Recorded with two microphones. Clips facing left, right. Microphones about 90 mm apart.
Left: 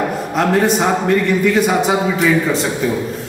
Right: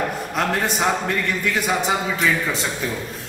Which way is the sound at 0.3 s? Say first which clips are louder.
Left 10 dB; 5° left (ahead or behind).